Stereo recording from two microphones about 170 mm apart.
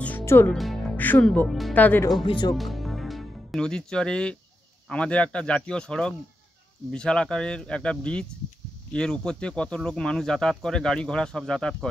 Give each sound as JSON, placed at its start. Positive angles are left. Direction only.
{"t": 0.0, "sound": "music", "side_deg": 10}
{"t": 0.6, "sound": "speech", "side_deg": 5}
{"t": 2.2, "sound": "speech", "side_deg": 25}
{"t": 2.5, "sound": "music", "side_deg": 0}
{"t": 4.8, "sound": "speech", "side_deg": 5}